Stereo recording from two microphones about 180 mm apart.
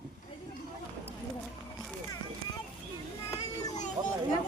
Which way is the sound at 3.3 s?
20° left (ahead or behind).